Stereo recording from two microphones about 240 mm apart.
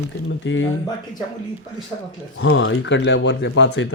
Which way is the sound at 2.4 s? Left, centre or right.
Left.